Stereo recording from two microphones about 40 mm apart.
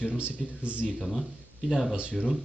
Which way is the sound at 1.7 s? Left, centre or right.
Centre.